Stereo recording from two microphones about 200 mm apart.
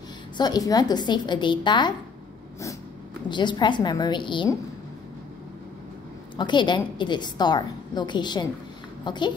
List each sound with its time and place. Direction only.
0.4 s a woman's voice: 20° left (ahead or behind)
3.3 s a woman's voice: 20° left (ahead or behind)
6.3 s a woman's voice: 20° left (ahead or behind)